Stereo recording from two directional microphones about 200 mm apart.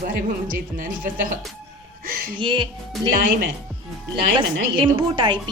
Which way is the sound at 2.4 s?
25° right (ahead or behind).